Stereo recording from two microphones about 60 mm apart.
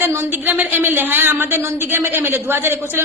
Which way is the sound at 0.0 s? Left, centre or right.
Right.